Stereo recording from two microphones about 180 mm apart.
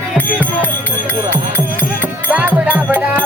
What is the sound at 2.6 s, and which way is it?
Music, 10° right (ahead or behind).